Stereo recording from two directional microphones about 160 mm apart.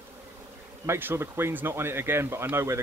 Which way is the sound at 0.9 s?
15° right (ahead or behind).